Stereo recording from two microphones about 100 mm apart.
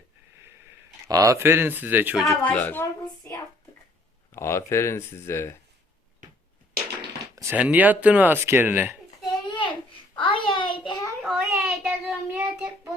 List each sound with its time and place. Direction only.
1.0 s speech: 35° right (ahead or behind)
2.1 s speech: centre (ahead or behind)
2.4 s speech: 15° left (ahead or behind)
4.3 s speech: 25° left (ahead or behind)
7.5 s speech: 15° right (ahead or behind)
9.2 s a sound: 50° left (ahead or behind)
11.2 s child singing: 10° right (ahead or behind)